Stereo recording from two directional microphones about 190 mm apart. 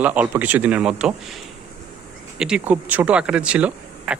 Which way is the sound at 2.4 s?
5° right (ahead or behind).